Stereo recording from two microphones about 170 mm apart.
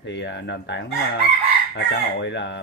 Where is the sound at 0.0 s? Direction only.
90° left.